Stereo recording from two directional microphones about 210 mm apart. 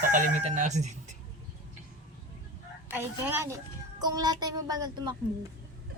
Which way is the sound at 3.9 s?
20° right (ahead or behind).